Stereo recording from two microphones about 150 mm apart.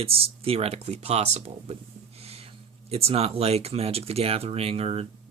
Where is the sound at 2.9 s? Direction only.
40° right (ahead or behind).